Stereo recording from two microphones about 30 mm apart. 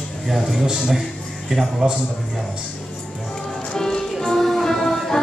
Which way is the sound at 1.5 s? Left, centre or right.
Centre.